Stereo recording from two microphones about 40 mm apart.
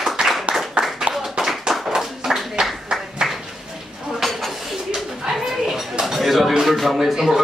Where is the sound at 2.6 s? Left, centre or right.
Centre.